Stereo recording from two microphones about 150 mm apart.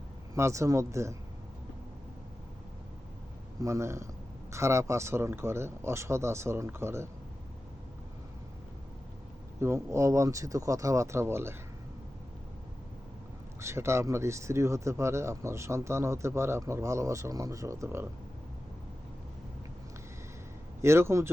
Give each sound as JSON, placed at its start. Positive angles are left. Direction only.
{"t": 0.3, "sound": "speech", "side_deg": -20}
{"t": 3.6, "sound": "speech", "side_deg": -20}
{"t": 9.6, "sound": "speech", "side_deg": -20}
{"t": 13.6, "sound": "speech", "side_deg": -20}
{"t": 20.8, "sound": "speech", "side_deg": -15}